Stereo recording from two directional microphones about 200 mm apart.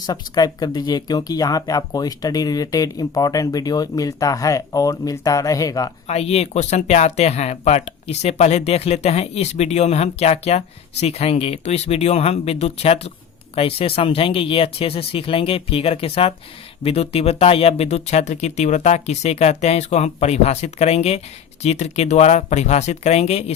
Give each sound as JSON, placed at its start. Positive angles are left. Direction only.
{"t": 0.0, "sound": "speech", "side_deg": 20}
{"t": 6.1, "sound": "speech", "side_deg": 30}